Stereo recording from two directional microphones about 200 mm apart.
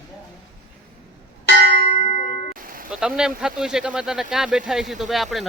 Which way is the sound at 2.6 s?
45° right (ahead or behind).